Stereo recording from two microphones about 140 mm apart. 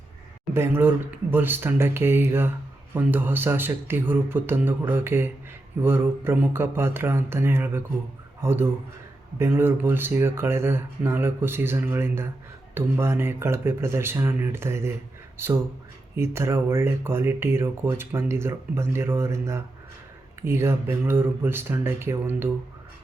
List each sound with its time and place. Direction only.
0.5 s speech: 15° right (ahead or behind)